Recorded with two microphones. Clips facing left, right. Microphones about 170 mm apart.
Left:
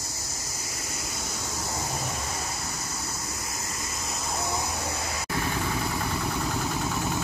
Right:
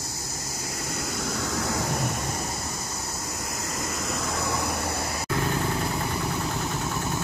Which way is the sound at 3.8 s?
90° right.